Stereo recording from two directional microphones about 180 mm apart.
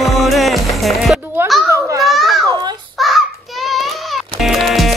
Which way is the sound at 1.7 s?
15° right (ahead or behind).